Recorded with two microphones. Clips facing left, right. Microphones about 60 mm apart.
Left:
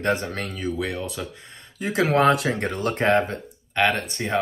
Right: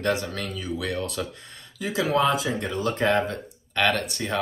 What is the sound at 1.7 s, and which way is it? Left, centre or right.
Speech, left.